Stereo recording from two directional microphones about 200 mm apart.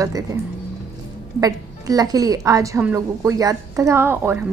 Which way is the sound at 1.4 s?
20° right (ahead or behind).